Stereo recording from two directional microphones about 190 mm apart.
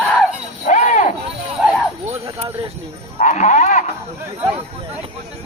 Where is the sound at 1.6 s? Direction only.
5° right (ahead or behind).